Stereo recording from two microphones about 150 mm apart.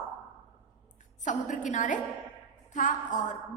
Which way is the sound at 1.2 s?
55° left (ahead or behind).